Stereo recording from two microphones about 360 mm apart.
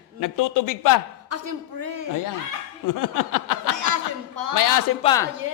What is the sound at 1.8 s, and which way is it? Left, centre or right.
Speech, right.